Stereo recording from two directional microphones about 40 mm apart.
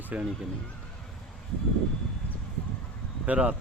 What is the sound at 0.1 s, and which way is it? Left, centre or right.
Speech, right.